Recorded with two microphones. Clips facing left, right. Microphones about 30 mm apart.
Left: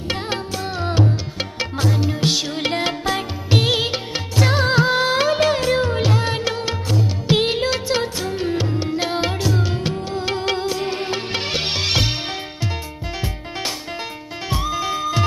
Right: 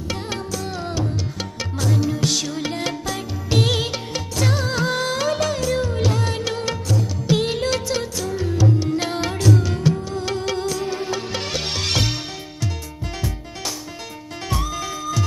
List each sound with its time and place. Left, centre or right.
0.1 s music: left
2.5 s music: left
3.5 s music: left
4.4 s music: left
8.9 s music: left
14.5 s music: left
15.0 s music: left